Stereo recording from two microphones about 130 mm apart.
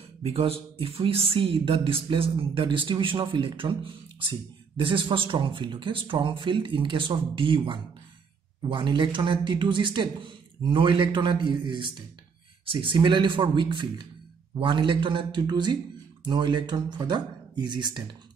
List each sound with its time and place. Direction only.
0.2 s speech: 45° right (ahead or behind)